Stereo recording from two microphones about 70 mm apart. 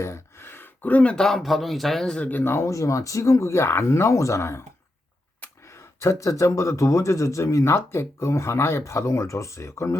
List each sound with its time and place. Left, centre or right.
0.0 s a sound: left; by 1.4 s centre
1.4 s a man's voice: centre
2.1 s speech: left
2.4 s a man's voice: left
5.6 s a man's voice: left